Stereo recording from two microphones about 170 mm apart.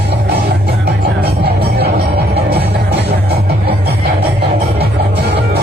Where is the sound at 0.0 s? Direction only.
70° right (ahead or behind).